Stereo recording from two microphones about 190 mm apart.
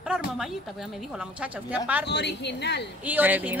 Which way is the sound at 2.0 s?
60° left (ahead or behind).